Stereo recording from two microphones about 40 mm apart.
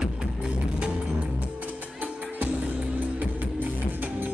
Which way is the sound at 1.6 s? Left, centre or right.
Right.